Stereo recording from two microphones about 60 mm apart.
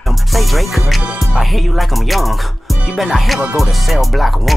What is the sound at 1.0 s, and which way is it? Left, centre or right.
Music, centre.